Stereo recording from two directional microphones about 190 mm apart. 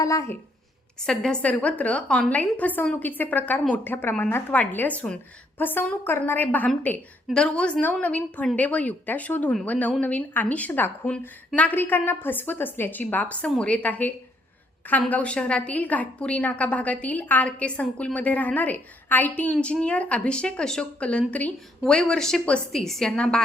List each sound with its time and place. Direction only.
0.0 s a woman's voice: 15° left (ahead or behind)
1.0 s a woman's voice: 5° left (ahead or behind)